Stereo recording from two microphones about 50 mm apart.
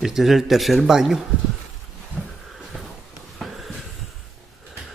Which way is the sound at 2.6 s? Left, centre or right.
Centre.